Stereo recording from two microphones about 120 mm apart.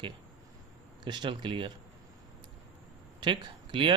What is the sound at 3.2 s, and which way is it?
Speech, 40° right (ahead or behind).